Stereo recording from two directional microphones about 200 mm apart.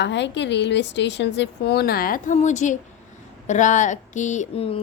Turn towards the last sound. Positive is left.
turn(degrees=35)  # may be behind; listen again after turning